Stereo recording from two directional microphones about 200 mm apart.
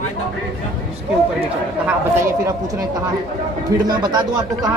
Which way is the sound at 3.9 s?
20° right (ahead or behind).